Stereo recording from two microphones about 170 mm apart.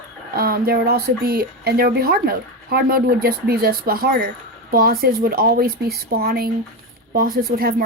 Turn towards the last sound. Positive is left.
turn(degrees=-60)  # may be behind; listen again after turning